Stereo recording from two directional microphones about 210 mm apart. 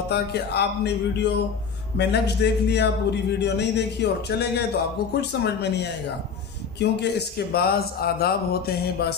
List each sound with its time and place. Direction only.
0.1 s a man's voice: 50° left (ahead or behind)